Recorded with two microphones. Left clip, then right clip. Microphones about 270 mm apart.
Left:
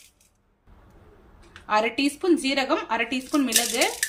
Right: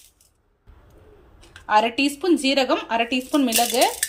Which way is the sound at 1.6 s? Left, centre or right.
Centre.